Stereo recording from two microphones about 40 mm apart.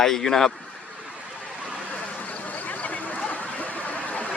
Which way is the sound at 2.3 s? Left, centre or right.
Left.